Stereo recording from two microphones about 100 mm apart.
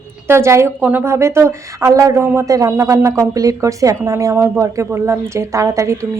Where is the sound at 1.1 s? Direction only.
30° right (ahead or behind).